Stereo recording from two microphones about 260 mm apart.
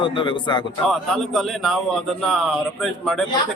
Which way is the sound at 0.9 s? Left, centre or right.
Centre.